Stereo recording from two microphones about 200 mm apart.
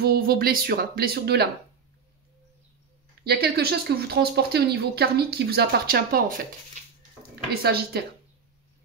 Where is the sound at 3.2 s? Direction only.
50° right (ahead or behind).